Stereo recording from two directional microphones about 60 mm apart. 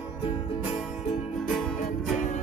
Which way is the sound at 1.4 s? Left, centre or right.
Centre.